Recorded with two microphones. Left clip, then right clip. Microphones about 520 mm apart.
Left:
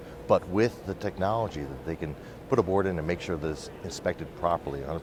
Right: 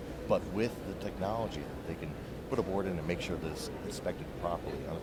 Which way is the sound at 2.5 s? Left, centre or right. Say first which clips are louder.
Left 9 dB; left.